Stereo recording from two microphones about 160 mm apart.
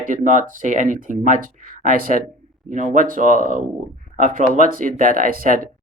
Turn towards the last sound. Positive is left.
turn(degrees=-60)  # may be behind; listen again after turning